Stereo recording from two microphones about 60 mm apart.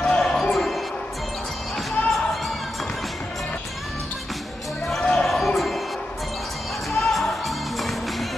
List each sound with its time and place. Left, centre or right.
0.0 s music: centre
2.0 s basketball bounce: left
5.0 s basketball bounce: centre
6.9 s music: centre